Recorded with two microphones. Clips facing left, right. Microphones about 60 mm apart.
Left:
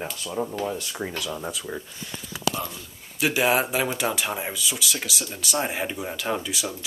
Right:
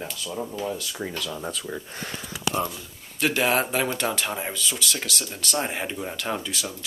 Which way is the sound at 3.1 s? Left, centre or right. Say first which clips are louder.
Left 1 dB; centre.